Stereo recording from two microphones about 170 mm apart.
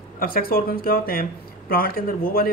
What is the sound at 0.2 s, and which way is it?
Speech, 60° left (ahead or behind).